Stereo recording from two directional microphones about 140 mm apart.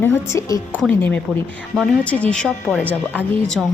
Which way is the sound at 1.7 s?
Centre (ahead or behind).